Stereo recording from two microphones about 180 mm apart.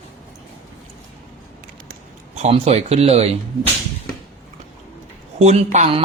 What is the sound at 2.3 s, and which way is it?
Speech, 35° right (ahead or behind).